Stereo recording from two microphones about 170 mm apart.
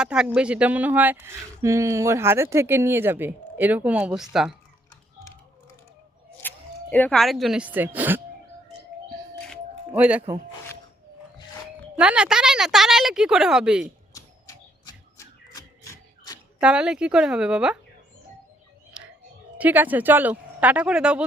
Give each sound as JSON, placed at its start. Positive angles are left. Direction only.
{"t": 0.0, "sound": "speech", "side_deg": -5}
{"t": 6.4, "sound": "single-lens reflex camera", "side_deg": 10}
{"t": 6.9, "sound": "speech", "side_deg": 5}
{"t": 9.9, "sound": "speech", "side_deg": -10}
{"t": 11.9, "sound": "speech", "side_deg": -5}
{"t": 14.2, "sound": "bird", "side_deg": 20}
{"t": 15.5, "sound": "a sound", "side_deg": 20}
{"t": 16.6, "sound": "speech", "side_deg": -5}
{"t": 19.5, "sound": "speech", "side_deg": -10}